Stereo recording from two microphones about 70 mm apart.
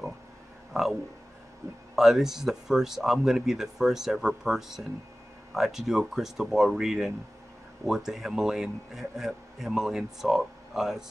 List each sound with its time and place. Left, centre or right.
0.7 s a man's voice: centre
2.0 s a man's voice: centre